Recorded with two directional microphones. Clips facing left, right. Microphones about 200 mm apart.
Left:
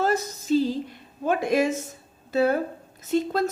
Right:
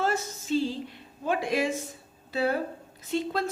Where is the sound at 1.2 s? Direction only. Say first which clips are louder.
Left 5 dB; 45° left (ahead or behind).